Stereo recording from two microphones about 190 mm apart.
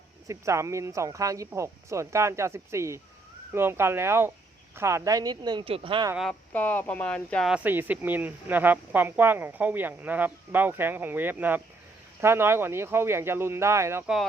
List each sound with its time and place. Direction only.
0.3 s speech: 15° right (ahead or behind)
6.1 s speech: 5° left (ahead or behind); by 14.0 s 15° right (ahead or behind)